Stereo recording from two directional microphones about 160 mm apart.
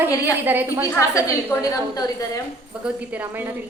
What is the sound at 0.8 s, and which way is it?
A woman's voice, 20° left (ahead or behind).